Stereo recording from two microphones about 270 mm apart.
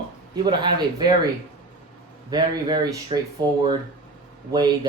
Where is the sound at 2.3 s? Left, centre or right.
Centre.